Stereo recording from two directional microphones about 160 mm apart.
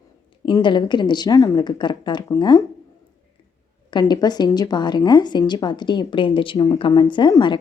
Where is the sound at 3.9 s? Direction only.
25° left (ahead or behind).